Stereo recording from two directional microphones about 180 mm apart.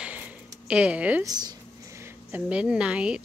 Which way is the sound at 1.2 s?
20° right (ahead or behind).